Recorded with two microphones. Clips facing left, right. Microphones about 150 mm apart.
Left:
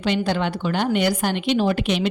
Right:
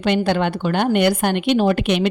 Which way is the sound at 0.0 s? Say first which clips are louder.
Right 4 dB; 55° right (ahead or behind).